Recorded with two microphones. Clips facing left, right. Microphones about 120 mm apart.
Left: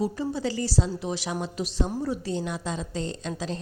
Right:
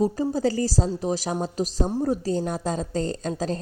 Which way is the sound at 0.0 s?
40° right (ahead or behind).